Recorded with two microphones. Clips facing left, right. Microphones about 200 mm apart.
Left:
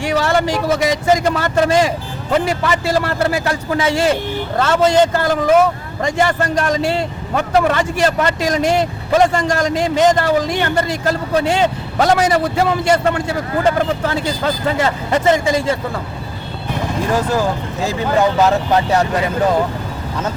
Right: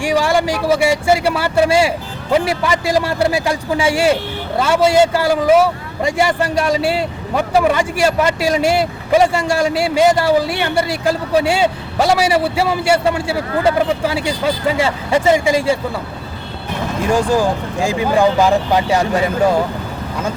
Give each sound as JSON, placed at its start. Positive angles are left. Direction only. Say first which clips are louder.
{"t": 0.0, "sound": "a man's voice", "louder": "right 1 dB", "side_deg": -10}
{"t": 17.1, "sound": "a man's voice", "louder": "right 3 dB", "side_deg": -15}